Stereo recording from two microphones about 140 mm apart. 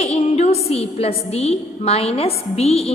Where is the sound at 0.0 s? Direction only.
50° left (ahead or behind).